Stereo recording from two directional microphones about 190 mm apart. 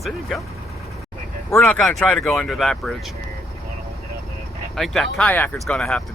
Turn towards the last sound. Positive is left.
turn(degrees=5)  # may be behind; listen again after turning